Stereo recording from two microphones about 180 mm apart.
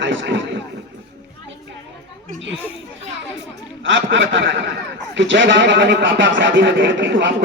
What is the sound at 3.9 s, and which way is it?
A man's voice, 90° right.